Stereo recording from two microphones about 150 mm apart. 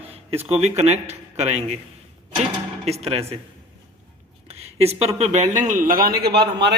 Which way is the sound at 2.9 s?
45° right (ahead or behind).